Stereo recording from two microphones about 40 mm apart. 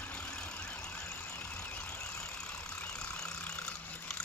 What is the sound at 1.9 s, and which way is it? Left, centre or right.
Vehicle, left.